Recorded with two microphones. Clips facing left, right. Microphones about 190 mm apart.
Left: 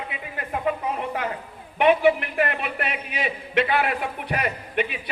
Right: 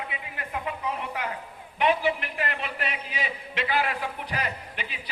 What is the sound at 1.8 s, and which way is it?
A man's voice, 60° left (ahead or behind).